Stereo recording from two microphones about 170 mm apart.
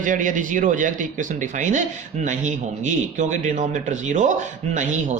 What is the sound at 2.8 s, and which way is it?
A man's voice, 45° right (ahead or behind).